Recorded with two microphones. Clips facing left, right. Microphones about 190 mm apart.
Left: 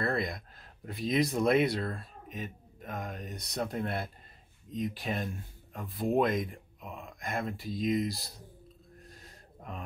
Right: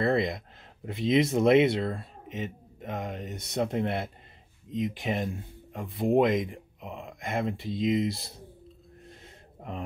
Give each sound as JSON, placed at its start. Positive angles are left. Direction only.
{"t": 0.0, "sound": "a sound", "side_deg": -25}
{"t": 0.8, "sound": "speech", "side_deg": -25}
{"t": 9.0, "sound": "gasp", "side_deg": -25}